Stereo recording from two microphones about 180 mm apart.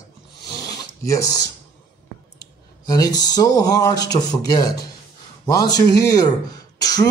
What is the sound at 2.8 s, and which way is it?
Speech, 20° left (ahead or behind).